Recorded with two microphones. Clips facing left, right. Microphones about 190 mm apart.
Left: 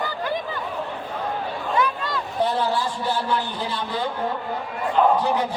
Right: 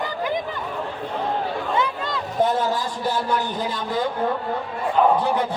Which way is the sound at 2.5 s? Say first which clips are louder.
Even; 45° right (ahead or behind).